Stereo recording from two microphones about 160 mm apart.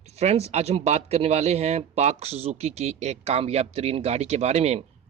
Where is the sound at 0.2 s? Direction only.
40° right (ahead or behind).